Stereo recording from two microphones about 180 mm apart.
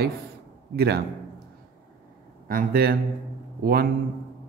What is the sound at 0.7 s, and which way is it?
Speech, 60° right (ahead or behind).